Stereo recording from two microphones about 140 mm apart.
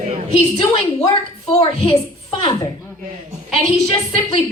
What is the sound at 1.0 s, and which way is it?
Speech, 30° left (ahead or behind).